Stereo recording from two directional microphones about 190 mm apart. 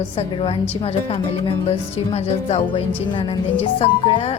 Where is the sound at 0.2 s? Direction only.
30° left (ahead or behind).